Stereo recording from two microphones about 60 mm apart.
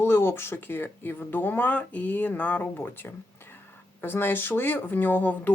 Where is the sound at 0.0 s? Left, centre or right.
Left.